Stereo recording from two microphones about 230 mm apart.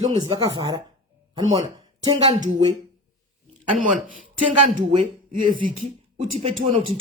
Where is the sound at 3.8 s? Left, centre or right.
Right.